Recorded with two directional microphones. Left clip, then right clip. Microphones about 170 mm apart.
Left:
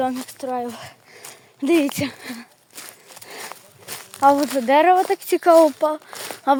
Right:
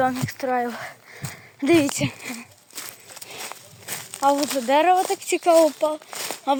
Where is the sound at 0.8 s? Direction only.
20° left (ahead or behind).